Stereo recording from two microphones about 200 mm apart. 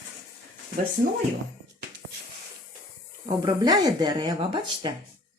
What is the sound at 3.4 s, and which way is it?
Speech, 20° right (ahead or behind).